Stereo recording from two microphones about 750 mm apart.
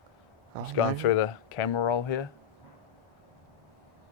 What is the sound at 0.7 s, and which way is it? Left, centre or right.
Speech, left.